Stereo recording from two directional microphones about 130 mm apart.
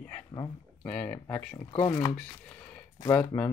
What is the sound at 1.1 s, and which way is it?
Speech, 10° left (ahead or behind).